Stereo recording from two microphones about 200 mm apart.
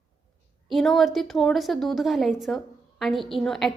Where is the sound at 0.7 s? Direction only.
Centre (ahead or behind).